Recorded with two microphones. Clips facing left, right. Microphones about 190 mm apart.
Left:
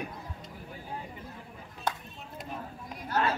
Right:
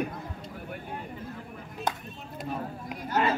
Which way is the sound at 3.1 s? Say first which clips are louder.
Right 3 dB; 15° right (ahead or behind).